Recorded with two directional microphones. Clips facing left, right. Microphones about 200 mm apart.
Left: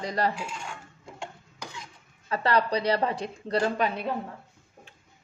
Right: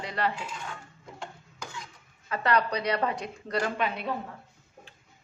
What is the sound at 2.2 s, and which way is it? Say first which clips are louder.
Speech: left 1 dB; 30° left (ahead or behind).